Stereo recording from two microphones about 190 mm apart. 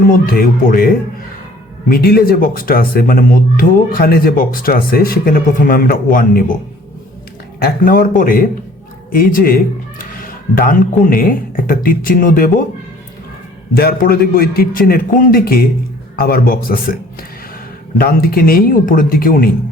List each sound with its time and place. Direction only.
0.1 s speech: 50° left (ahead or behind)
7.6 s speech: 45° left (ahead or behind)
13.7 s speech: 55° left (ahead or behind)